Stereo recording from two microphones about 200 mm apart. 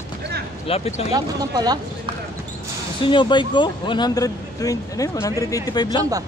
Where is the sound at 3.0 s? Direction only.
25° left (ahead or behind).